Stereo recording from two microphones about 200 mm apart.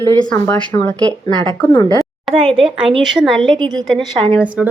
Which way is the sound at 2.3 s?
25° right (ahead or behind).